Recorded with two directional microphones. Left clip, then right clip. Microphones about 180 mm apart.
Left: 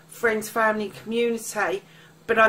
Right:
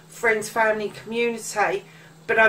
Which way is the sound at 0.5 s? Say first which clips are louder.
Even; 50° left (ahead or behind).